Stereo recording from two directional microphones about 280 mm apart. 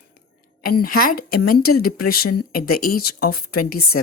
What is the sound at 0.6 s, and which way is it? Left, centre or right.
Speech, left.